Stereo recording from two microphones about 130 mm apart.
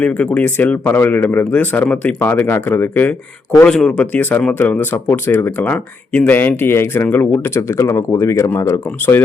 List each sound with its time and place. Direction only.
0.0 s speech: 10° left (ahead or behind)